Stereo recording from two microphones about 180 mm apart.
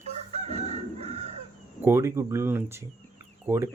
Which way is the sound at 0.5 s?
35° right (ahead or behind).